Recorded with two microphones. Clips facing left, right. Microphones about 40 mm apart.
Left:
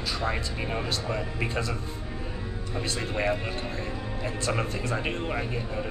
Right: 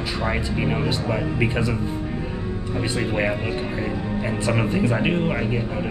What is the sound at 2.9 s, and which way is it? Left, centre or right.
Speech, right.